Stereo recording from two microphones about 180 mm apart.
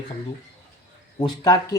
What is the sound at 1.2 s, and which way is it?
Speech, 20° left (ahead or behind).